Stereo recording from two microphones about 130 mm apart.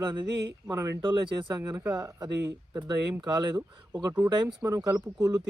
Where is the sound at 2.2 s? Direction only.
25° right (ahead or behind).